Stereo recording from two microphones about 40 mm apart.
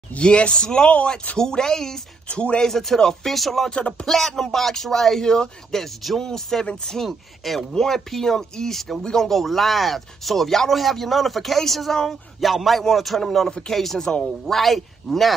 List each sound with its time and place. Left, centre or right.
0.2 s speech: left
2.2 s speech: left
2.6 s speech: centre
14.4 s speech: centre